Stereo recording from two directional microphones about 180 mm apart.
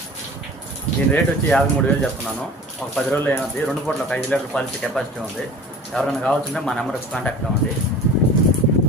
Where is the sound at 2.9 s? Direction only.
10° left (ahead or behind).